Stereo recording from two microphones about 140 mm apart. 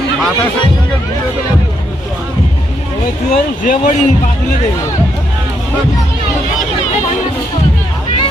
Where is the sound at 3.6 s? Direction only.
70° left (ahead or behind).